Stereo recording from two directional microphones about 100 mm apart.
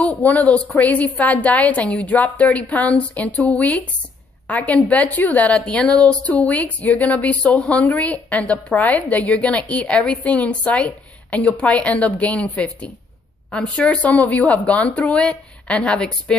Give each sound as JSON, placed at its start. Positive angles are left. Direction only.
{"t": 0.0, "sound": "a woman's voice", "side_deg": 15}